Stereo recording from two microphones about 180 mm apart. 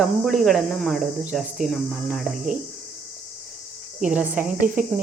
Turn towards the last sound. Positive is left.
turn(degrees=-45)  # may be behind; listen again after turning